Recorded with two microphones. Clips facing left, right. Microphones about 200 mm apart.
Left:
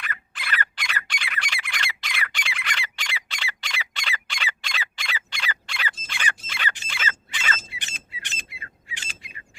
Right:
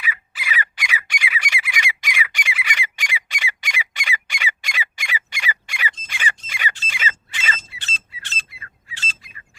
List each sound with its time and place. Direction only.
0.0 s bird: 5° right (ahead or behind)
6.5 s a sound: 10° right (ahead or behind)
7.7 s bird: 15° left (ahead or behind)